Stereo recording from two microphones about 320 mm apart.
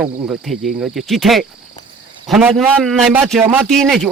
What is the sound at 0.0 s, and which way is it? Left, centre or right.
A man's voice, centre.